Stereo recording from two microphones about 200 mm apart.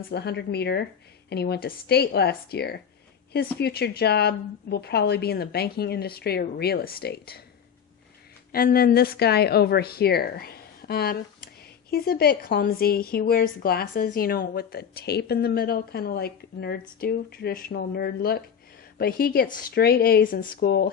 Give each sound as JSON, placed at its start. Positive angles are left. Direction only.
{"t": 0.1, "sound": "a woman's voice", "side_deg": 55}
{"t": 8.5, "sound": "a woman's voice", "side_deg": 45}